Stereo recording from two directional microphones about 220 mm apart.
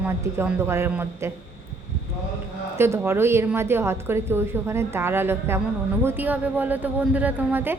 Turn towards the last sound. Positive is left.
turn(degrees=-10)  # may be behind; listen again after turning